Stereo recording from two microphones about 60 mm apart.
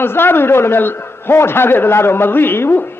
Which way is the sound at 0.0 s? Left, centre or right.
Left.